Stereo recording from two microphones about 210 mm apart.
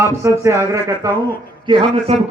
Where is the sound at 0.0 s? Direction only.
15° right (ahead or behind).